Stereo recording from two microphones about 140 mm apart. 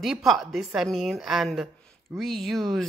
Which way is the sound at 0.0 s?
Centre (ahead or behind).